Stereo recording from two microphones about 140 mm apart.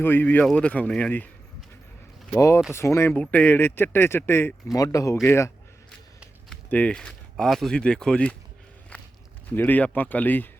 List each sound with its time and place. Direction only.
0.0 s speech: 15° left (ahead or behind)
2.3 s speech: 20° left (ahead or behind)
6.5 s speech: 10° left (ahead or behind)
9.5 s speech: 10° left (ahead or behind)